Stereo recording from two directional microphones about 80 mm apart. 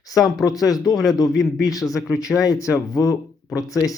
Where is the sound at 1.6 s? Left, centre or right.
Left.